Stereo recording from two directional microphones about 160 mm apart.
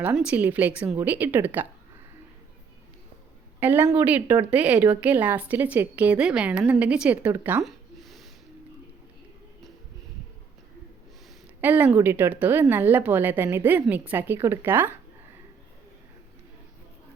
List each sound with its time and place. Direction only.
0.3 s a woman's voice: 10° right (ahead or behind)
3.6 s a woman's voice: 10° right (ahead or behind)
7.6 s a sound: centre (ahead or behind)
11.6 s a woman's voice: 10° right (ahead or behind)